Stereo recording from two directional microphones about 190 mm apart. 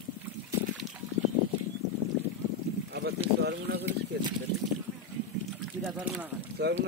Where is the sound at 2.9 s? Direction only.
55° right (ahead or behind).